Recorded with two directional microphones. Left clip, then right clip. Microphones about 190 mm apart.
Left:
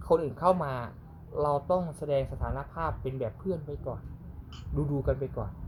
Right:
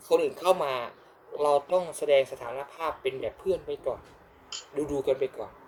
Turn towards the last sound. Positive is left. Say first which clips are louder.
# right 4 dB
turn(degrees=-10)  # may be behind; listen again after turning